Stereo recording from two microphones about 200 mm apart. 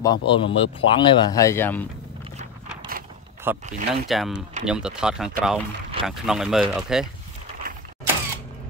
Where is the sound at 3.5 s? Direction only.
10° right (ahead or behind).